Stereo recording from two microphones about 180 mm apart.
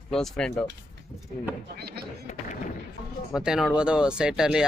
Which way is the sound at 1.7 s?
60° right (ahead or behind).